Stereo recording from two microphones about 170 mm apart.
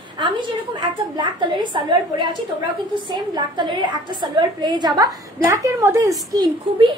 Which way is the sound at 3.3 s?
25° right (ahead or behind).